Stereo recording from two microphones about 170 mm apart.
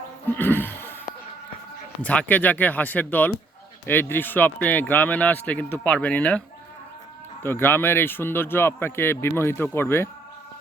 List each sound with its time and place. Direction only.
0.3 s a sound: 10° left (ahead or behind)
2.0 s speech: 10° left (ahead or behind)
7.4 s speech: 15° left (ahead or behind)